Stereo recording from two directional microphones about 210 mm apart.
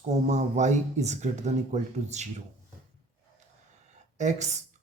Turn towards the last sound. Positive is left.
turn(degrees=-35)  # may be behind; listen again after turning